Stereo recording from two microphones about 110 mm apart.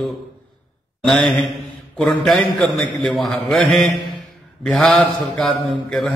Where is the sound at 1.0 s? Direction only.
5° left (ahead or behind).